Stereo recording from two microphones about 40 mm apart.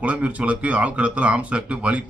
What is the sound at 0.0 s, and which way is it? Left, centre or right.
A man's voice, right.